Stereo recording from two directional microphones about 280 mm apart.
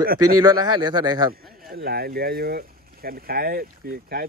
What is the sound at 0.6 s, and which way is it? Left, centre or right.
Speech, centre.